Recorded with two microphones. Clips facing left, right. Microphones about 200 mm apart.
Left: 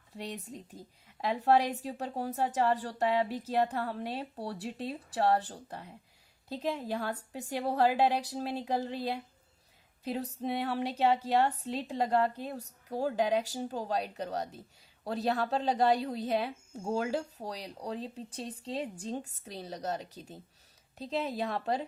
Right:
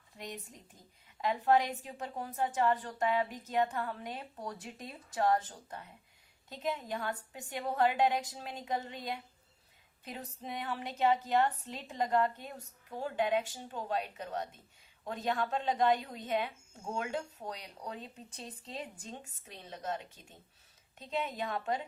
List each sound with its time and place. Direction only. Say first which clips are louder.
1.2 s a woman's voice: left 2 dB; 35° left (ahead or behind)